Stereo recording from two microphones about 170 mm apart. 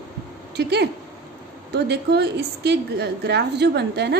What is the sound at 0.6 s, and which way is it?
A woman's voice, 75° right (ahead or behind).